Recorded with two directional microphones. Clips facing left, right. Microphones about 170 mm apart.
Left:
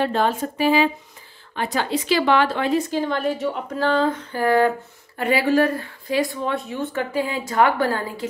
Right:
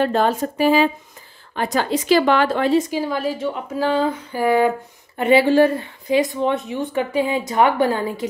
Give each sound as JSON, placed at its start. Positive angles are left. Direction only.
{"t": 0.0, "sound": "a woman's voice", "side_deg": -45}
{"t": 2.9, "sound": "speech", "side_deg": -5}